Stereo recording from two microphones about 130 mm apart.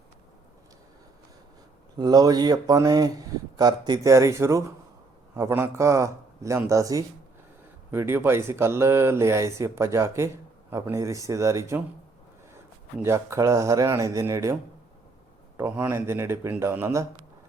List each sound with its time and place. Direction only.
2.0 s speech: 30° right (ahead or behind)
13.0 s speech: 20° right (ahead or behind)
15.5 s speech: 15° right (ahead or behind)